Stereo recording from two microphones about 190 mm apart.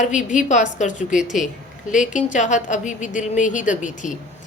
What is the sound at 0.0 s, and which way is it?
Speech, 40° left (ahead or behind).